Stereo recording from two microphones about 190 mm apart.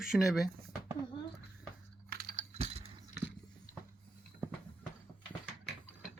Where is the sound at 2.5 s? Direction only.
30° right (ahead or behind).